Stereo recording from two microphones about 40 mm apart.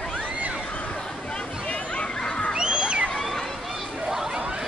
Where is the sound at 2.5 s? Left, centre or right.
Right.